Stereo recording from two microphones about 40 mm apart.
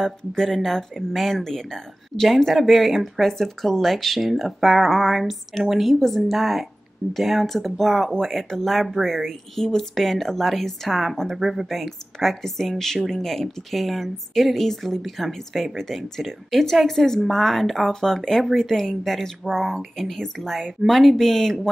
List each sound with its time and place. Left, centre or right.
0.0 s speech: centre